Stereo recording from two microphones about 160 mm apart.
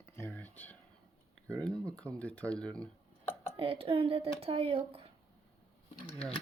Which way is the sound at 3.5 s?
35° right (ahead or behind).